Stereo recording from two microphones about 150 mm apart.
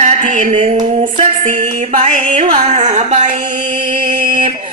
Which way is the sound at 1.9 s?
60° right (ahead or behind).